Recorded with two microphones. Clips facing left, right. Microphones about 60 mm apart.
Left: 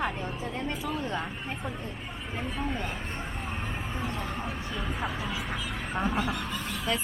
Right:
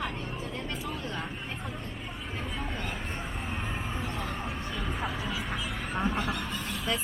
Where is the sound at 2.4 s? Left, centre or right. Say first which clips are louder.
Left 4 dB; centre.